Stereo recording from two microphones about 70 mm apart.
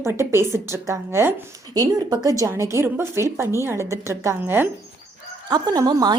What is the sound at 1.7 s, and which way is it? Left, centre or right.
Speech, right.